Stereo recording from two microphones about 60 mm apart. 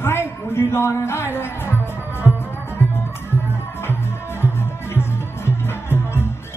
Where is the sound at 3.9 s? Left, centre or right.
Left.